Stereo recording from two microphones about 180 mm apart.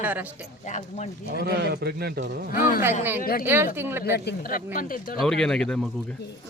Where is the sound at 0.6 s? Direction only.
45° left (ahead or behind).